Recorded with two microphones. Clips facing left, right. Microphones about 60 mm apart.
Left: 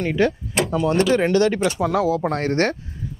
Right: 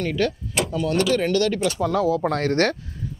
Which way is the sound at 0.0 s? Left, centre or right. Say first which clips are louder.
Left 3 dB; left.